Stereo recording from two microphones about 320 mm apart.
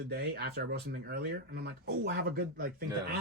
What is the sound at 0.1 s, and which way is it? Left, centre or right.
Speech, right.